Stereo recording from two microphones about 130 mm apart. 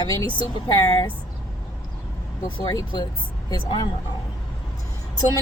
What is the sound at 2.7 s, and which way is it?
Speech, 30° left (ahead or behind).